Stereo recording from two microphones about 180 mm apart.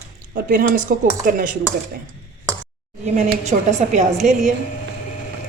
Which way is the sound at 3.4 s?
40° right (ahead or behind).